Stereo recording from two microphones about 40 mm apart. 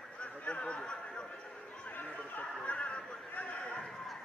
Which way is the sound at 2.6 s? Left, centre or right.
Left.